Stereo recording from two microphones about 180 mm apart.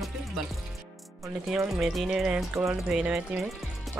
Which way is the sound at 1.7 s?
Centre (ahead or behind).